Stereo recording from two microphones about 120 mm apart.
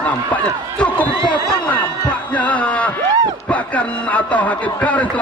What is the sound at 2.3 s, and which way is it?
Heart sounds, 10° left (ahead or behind).